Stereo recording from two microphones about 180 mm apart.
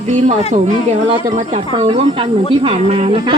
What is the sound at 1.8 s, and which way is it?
Speech, 30° right (ahead or behind).